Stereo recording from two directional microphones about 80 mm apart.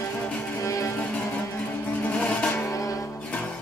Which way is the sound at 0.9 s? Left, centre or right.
Centre.